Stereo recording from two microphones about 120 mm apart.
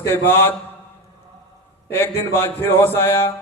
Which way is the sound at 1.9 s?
20° left (ahead or behind).